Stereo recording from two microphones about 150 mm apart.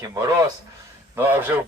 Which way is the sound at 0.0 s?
25° right (ahead or behind).